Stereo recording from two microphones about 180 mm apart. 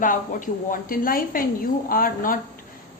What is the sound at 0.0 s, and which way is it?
A woman's voice, 50° left (ahead or behind).